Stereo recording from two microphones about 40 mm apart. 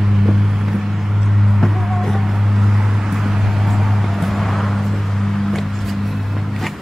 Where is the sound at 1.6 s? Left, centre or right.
Centre.